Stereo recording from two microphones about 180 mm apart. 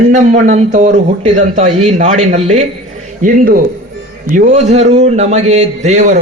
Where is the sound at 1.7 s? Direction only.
35° right (ahead or behind).